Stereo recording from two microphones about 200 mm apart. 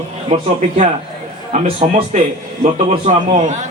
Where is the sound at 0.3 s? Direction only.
30° right (ahead or behind).